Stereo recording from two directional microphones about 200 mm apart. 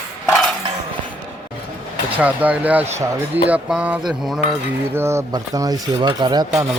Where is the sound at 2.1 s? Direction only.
10° right (ahead or behind).